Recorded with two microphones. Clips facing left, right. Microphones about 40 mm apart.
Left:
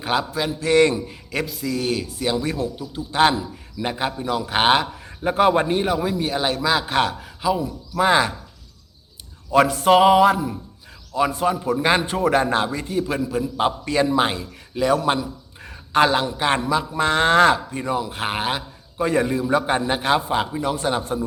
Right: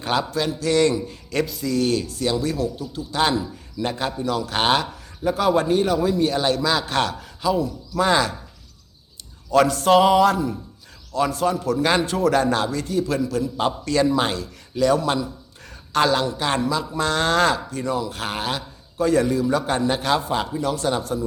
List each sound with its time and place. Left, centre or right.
0.0 s a man's voice: centre
0.6 s a man's voice: left
1.3 s a man's voice: centre
5.2 s a man's voice: left
9.5 s a man's voice: centre